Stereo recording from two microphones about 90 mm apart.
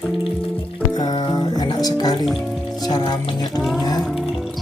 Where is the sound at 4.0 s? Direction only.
Centre (ahead or behind).